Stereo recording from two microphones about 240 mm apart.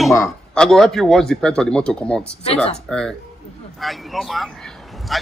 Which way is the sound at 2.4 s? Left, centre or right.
Left.